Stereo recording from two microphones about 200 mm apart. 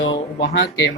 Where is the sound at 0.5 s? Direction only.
65° left (ahead or behind).